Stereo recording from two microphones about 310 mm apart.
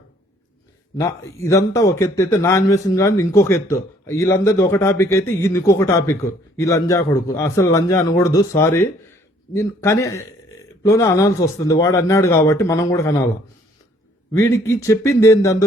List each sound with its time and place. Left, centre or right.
0.9 s a man's voice: centre
14.3 s a man's voice: centre